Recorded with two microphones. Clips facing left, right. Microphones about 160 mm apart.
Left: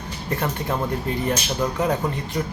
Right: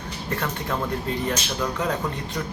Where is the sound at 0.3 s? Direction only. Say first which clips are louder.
Left 3 dB; 20° left (ahead or behind).